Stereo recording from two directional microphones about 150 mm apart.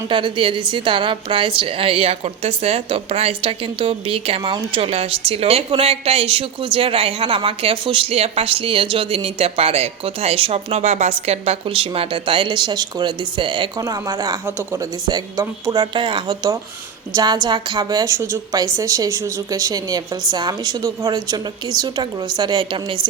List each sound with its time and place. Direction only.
0.1 s a woman's voice: 35° right (ahead or behind)